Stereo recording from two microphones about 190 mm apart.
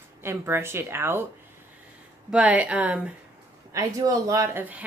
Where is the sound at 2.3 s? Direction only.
5° right (ahead or behind).